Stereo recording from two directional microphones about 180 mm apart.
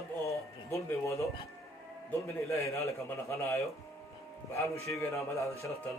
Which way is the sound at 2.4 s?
15° left (ahead or behind).